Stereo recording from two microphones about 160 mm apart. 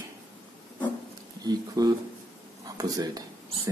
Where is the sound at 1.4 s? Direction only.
25° right (ahead or behind).